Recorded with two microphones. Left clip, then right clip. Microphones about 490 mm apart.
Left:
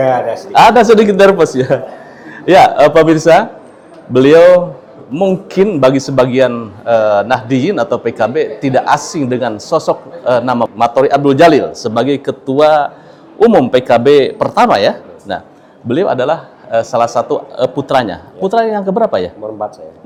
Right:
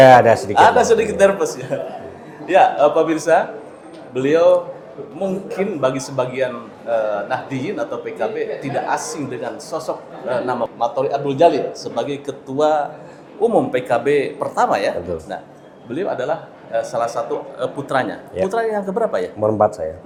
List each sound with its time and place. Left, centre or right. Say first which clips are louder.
0.0 s a man's voice: right 4 dB; right
0.6 s a man's voice: left 8 dB; left
5.5 s a man's voice: left 10 dB; left
19.4 s speech: right 5 dB; right